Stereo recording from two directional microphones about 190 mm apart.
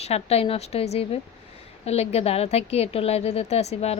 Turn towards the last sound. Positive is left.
turn(degrees=35)  # may be behind; listen again after turning